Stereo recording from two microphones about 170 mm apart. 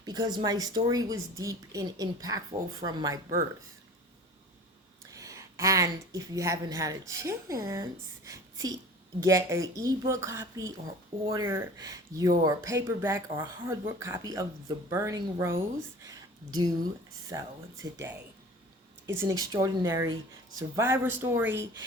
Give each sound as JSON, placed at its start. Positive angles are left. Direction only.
{"t": 0.0, "sound": "a woman's voice", "side_deg": -25}
{"t": 5.1, "sound": "a woman's voice", "side_deg": -20}
{"t": 16.0, "sound": "a sound", "side_deg": -25}
{"t": 17.9, "sound": "a woman's voice", "side_deg": -15}